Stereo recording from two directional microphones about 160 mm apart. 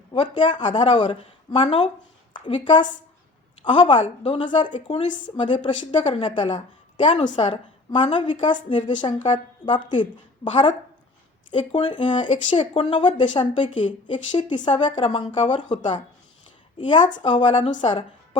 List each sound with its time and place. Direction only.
0.1 s a woman's voice: 30° left (ahead or behind)